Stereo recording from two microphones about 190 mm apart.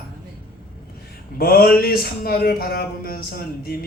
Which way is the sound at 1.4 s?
50° left (ahead or behind).